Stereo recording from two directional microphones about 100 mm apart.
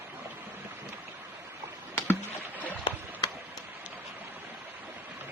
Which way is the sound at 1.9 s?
20° left (ahead or behind).